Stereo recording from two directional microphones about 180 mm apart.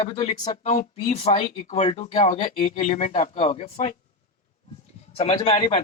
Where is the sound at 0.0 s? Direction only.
35° left (ahead or behind).